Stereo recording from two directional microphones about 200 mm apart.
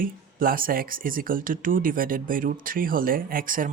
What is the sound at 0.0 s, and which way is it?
Speech, 45° right (ahead or behind).